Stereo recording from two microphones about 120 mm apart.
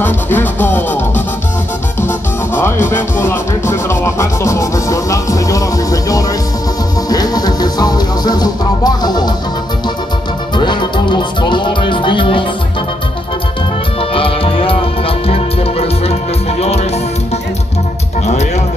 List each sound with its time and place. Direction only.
0.0 s music: 15° left (ahead or behind)
2.5 s music: 20° left (ahead or behind); by 9.3 s 35° left (ahead or behind)
10.6 s music: 40° left (ahead or behind)
14.1 s music: 50° left (ahead or behind)
18.2 s music: 70° left (ahead or behind)